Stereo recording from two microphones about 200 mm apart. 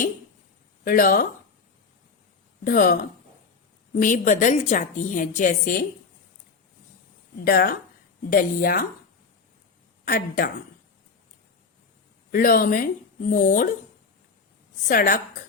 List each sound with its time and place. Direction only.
0.9 s a woman's voice: 45° left (ahead or behind)
2.6 s a woman's voice: 45° left (ahead or behind)
7.4 s a woman's voice: 50° left (ahead or behind)
10.1 s a woman's voice: 45° left (ahead or behind)
12.3 s a woman's voice: 45° left (ahead or behind)
14.8 s a woman's voice: 45° left (ahead or behind)